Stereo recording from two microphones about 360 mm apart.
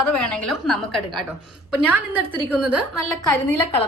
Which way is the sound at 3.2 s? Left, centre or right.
Centre.